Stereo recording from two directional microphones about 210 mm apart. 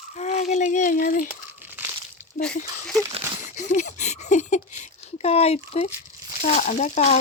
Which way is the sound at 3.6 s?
35° left (ahead or behind).